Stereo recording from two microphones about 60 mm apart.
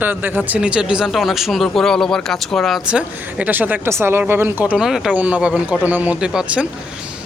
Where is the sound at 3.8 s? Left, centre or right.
Right.